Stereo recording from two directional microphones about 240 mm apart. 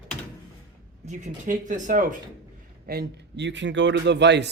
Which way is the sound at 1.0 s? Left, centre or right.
Right.